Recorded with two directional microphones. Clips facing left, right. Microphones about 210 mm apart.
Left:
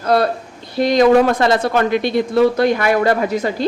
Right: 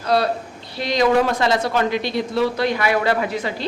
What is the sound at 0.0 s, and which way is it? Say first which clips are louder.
A woman's voice: left 3 dB; 50° left (ahead or behind).